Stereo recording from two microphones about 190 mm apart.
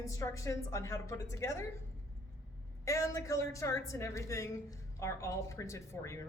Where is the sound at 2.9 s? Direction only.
15° left (ahead or behind).